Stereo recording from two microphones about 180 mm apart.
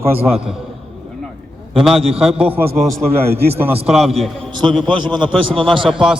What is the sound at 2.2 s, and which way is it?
Speech, 5° right (ahead or behind).